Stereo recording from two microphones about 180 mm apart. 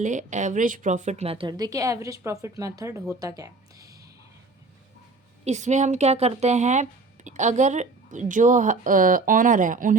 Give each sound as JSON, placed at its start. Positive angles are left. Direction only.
{"t": 0.0, "sound": "a woman's voice", "side_deg": -45}
{"t": 5.5, "sound": "a woman's voice", "side_deg": -40}